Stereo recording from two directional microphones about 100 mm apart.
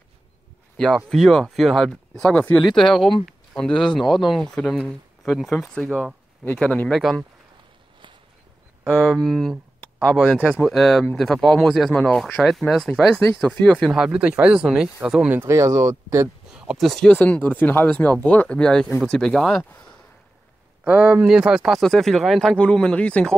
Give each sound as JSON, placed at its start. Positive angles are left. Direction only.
{"t": 0.7, "sound": "speech", "side_deg": 5}
{"t": 2.6, "sound": "speech", "side_deg": 5}
{"t": 5.2, "sound": "speech", "side_deg": 0}
{"t": 6.4, "sound": "speech", "side_deg": 15}
{"t": 6.9, "sound": "speech", "side_deg": 0}
{"t": 8.9, "sound": "speech", "side_deg": 0}
{"t": 10.3, "sound": "speech", "side_deg": -10}
{"t": 10.6, "sound": "speech", "side_deg": 5}
{"t": 15.2, "sound": "speech", "side_deg": -25}
{"t": 16.5, "sound": "speech", "side_deg": -5}
{"t": 17.2, "sound": "speech", "side_deg": 15}
{"t": 20.8, "sound": "speech", "side_deg": -10}